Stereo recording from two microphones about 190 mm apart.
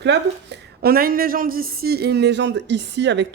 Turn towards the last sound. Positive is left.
turn(degrees=-65)  # may be behind; listen again after turning